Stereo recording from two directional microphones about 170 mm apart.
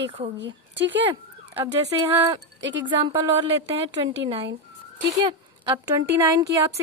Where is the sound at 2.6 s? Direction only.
90° right.